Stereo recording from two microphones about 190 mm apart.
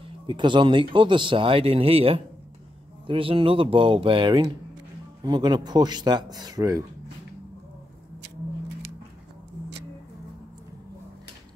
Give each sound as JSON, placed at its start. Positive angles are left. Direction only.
{"t": 0.3, "sound": "speech", "side_deg": -25}